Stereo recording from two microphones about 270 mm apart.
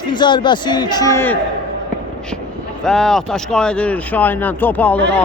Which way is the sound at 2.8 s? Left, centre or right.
Centre.